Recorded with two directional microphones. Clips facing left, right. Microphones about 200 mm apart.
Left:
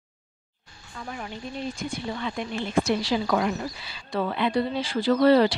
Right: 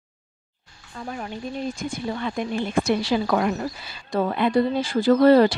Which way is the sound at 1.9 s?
50° right (ahead or behind).